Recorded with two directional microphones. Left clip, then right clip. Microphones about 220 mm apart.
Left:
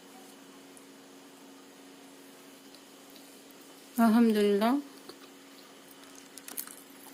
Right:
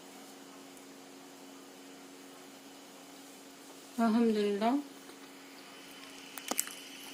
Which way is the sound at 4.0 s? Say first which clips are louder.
Left 4 dB; 45° left (ahead or behind).